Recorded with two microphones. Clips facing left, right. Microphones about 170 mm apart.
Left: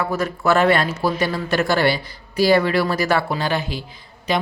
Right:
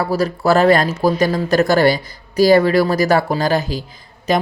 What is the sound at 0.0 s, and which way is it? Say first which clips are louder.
Speech: right 4 dB; 35° right (ahead or behind).